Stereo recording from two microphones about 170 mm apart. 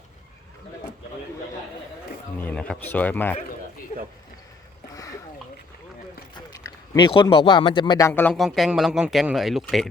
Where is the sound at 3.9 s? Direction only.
40° left (ahead or behind).